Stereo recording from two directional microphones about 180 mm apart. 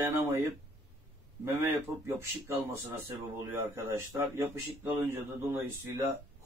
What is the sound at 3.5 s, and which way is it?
Speech, 15° right (ahead or behind).